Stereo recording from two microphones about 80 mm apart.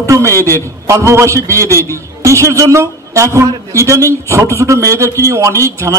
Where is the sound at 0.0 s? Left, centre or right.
Right.